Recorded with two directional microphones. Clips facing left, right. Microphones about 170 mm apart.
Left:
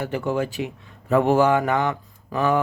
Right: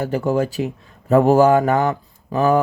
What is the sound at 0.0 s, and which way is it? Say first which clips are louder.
Speech: right 5 dB; 40° right (ahead or behind).